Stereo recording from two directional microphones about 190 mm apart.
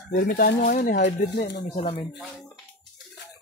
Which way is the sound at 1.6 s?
35° left (ahead or behind).